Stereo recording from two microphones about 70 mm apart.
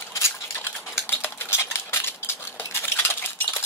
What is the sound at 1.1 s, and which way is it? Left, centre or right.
Cutlery, left.